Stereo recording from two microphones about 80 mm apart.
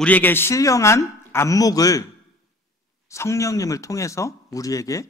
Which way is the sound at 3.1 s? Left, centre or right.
Left.